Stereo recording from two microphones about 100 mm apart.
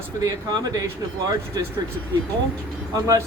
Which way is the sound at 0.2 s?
40° right (ahead or behind).